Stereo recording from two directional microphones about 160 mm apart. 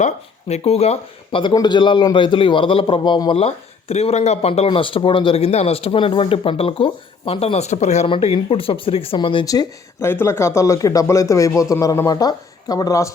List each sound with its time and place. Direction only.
0.0 s speech: 40° left (ahead or behind); by 13.1 s 20° left (ahead or behind)